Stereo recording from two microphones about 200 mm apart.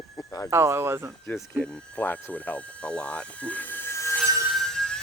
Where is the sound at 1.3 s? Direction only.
5° left (ahead or behind).